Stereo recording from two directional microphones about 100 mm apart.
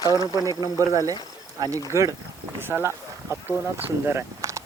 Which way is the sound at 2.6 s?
20° right (ahead or behind).